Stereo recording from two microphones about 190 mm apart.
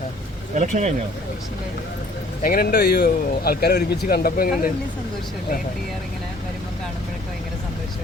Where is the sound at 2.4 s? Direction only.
50° left (ahead or behind).